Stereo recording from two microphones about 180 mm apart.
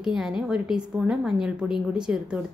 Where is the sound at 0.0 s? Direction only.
5° right (ahead or behind).